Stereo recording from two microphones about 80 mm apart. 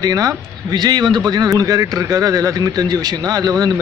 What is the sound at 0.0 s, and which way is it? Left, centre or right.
Speech, right.